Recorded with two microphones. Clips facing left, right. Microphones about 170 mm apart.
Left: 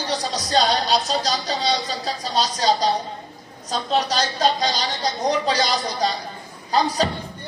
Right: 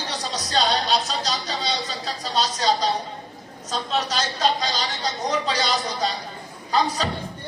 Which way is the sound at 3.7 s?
35° left (ahead or behind).